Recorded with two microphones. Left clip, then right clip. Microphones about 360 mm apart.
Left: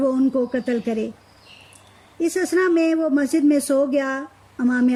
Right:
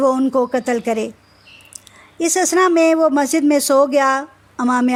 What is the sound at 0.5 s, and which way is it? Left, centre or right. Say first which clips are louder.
Speech: right 5 dB; centre.